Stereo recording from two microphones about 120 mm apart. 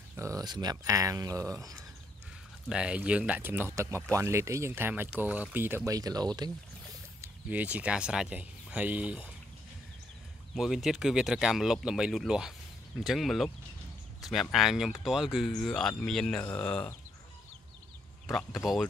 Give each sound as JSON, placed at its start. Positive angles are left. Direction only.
{"t": 0.2, "sound": "speech", "side_deg": -30}
{"t": 2.7, "sound": "speech", "side_deg": -10}
{"t": 5.9, "sound": "speech", "side_deg": -30}
{"t": 7.4, "sound": "speech", "side_deg": -10}
{"t": 10.5, "sound": "speech", "side_deg": 0}
{"t": 18.2, "sound": "speech", "side_deg": 0}